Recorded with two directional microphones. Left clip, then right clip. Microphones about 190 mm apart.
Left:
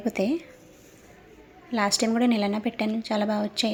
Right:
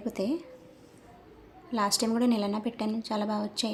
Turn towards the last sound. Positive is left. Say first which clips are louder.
# left 5 dB
turn(degrees=15)  # may be behind; listen again after turning